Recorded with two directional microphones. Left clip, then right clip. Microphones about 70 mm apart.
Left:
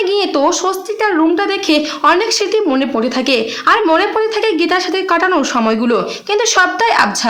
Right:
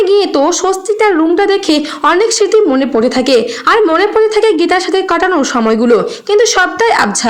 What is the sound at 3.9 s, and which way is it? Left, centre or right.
A woman's voice, right.